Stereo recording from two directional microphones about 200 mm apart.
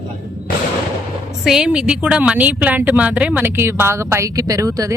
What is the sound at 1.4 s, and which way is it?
A woman's voice, 5° right (ahead or behind).